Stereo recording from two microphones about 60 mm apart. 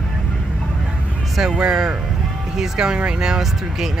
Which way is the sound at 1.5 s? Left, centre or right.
Centre.